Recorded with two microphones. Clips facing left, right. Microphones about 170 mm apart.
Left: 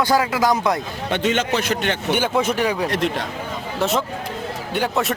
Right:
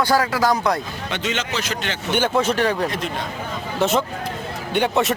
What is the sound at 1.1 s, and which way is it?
Speech, 50° left (ahead or behind).